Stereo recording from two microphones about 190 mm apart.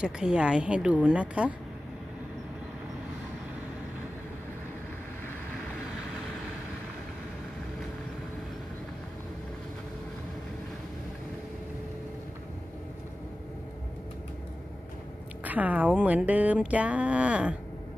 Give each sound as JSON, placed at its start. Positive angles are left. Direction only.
{"t": 0.0, "sound": "a woman's voice", "side_deg": -5}
{"t": 15.4, "sound": "speech", "side_deg": -10}